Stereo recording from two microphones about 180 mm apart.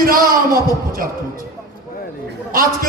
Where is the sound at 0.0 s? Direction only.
50° right (ahead or behind).